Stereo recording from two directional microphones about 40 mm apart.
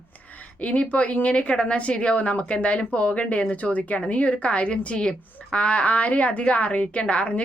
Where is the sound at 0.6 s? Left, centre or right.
Left.